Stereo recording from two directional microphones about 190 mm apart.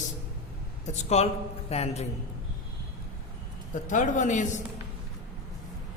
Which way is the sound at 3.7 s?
40° left (ahead or behind).